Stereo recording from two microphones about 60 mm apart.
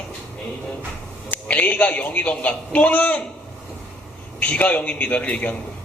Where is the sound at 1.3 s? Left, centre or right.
Left.